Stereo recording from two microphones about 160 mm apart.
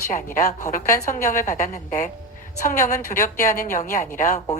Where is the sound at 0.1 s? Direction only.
50° left (ahead or behind).